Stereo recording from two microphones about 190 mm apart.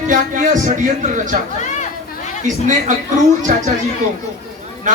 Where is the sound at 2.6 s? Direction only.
40° right (ahead or behind).